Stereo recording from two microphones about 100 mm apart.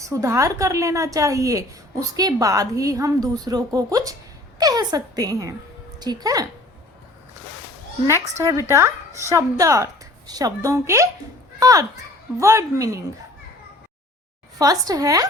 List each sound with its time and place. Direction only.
0.0 s a woman's voice: 30° right (ahead or behind)
8.0 s a woman's voice: 30° right (ahead or behind)
14.6 s a woman's voice: 35° right (ahead or behind)